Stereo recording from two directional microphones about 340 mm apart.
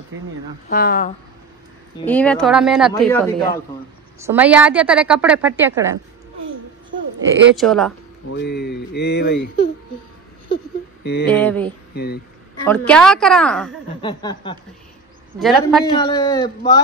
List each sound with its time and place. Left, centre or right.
0.7 s speech: left
2.0 s a woman's voice: centre
4.2 s a woman's voice: centre
7.5 s a woman's voice: centre
8.3 s speech: left
11.2 s a woman's voice: centre
11.9 s speech: left
12.6 s a woman's voice: centre
14.0 s a man's voice: centre
15.3 s a woman's voice: centre
15.8 s a man's voice: centre